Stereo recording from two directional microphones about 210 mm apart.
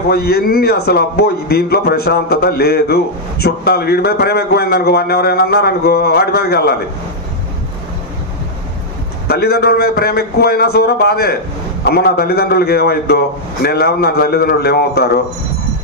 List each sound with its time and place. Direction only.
0.1 s a man's voice: 50° left (ahead or behind)
9.3 s a man's voice: 50° left (ahead or behind)